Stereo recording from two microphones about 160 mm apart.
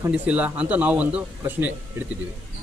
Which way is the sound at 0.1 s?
10° right (ahead or behind).